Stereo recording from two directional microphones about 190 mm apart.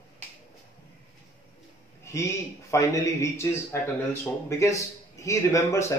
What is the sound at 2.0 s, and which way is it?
Speech, 15° left (ahead or behind).